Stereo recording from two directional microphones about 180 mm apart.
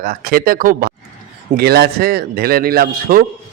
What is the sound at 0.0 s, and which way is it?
A man's voice, 55° right (ahead or behind).